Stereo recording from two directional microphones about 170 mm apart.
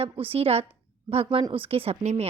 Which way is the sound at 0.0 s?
35° right (ahead or behind).